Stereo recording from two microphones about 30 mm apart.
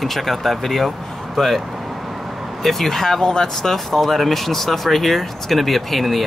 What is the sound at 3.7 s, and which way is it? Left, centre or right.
Speech, centre.